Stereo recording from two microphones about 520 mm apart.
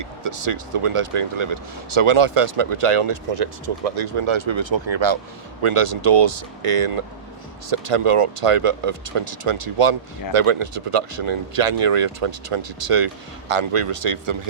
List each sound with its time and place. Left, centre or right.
0.2 s speech: right
5.6 s speech: right